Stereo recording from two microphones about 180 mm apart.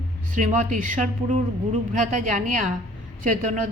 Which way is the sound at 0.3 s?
40° right (ahead or behind).